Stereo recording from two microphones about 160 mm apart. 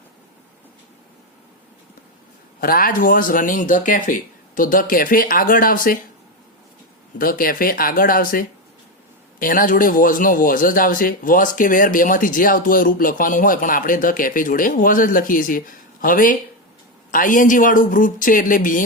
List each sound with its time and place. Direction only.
2.6 s a man's voice: 65° left (ahead or behind)
7.2 s a man's voice: 60° left (ahead or behind)